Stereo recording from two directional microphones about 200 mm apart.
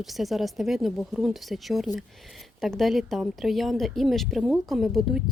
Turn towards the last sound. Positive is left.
turn(degrees=0)  # may be behind; listen again after turning